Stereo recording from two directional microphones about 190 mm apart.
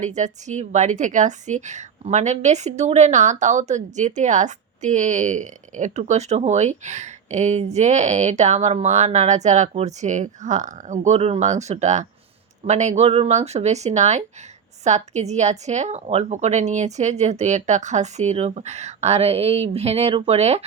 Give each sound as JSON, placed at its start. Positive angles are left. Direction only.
{"t": 0.0, "sound": "speech", "side_deg": -40}